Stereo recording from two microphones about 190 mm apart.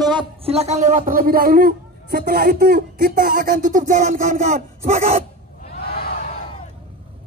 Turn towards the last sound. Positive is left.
turn(degrees=55)  # may be behind; listen again after turning